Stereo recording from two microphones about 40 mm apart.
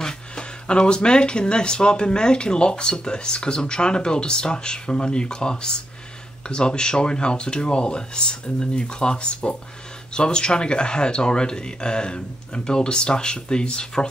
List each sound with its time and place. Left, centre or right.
0.0 s speech: left